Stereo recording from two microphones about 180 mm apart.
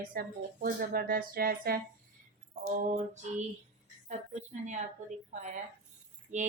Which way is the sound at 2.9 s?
40° right (ahead or behind).